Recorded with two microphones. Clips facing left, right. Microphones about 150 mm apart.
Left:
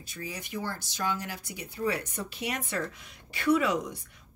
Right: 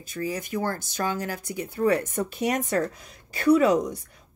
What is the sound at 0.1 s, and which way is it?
A woman's voice, 45° right (ahead or behind).